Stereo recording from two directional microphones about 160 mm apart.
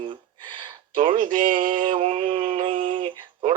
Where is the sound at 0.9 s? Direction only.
55° right (ahead or behind).